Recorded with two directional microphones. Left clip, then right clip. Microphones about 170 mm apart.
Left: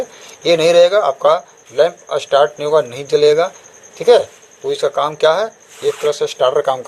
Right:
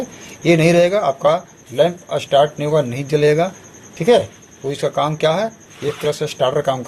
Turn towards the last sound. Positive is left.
turn(degrees=30)  # may be behind; listen again after turning